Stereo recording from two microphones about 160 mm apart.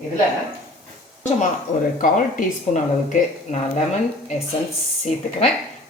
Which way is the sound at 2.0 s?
55° left (ahead or behind).